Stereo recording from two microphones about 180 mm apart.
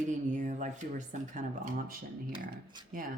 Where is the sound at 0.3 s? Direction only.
45° right (ahead or behind).